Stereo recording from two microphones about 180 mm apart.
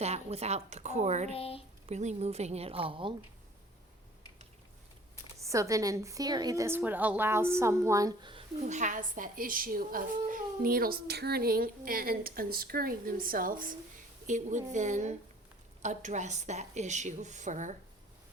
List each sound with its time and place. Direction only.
0.0 s a woman's voice: 35° right (ahead or behind)
1.3 s speech: 35° left (ahead or behind)
1.9 s a woman's voice: 40° right (ahead or behind)
5.4 s a woman's voice: 15° right (ahead or behind); by 17.7 s 45° right (ahead or behind)